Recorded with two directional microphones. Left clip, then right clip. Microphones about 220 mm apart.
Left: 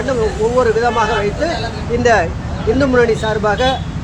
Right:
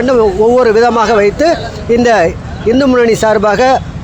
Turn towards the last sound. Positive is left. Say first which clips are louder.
# right 7 dB
turn(degrees=-50)  # may be behind; listen again after turning